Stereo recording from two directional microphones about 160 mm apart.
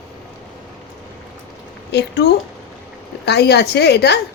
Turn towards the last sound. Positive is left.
turn(degrees=90)